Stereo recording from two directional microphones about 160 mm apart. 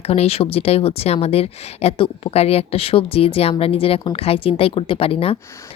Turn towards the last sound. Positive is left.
turn(degrees=35)  # may be behind; listen again after turning